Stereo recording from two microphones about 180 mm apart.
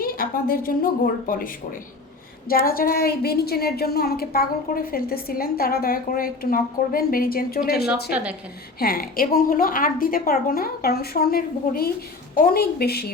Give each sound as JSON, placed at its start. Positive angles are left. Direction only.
{"t": 0.0, "sound": "a woman's voice", "side_deg": 55}
{"t": 8.1, "sound": "a woman's voice", "side_deg": -5}
{"t": 8.8, "sound": "a woman's voice", "side_deg": 55}